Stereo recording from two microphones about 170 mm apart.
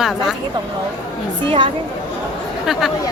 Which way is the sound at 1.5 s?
30° right (ahead or behind).